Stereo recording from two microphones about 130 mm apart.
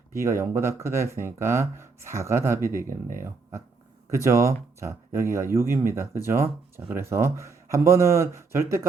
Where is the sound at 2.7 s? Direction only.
90° right.